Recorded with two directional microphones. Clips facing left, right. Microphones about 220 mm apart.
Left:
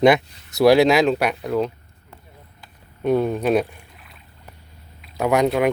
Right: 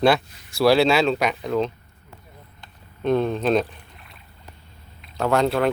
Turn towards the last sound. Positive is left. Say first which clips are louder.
# left 2 dB
turn(degrees=15)  # may be behind; listen again after turning